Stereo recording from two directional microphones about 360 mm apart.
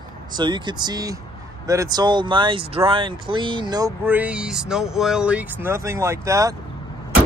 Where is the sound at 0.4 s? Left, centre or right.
Centre.